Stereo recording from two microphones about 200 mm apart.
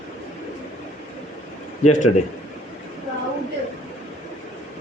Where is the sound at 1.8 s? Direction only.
35° left (ahead or behind).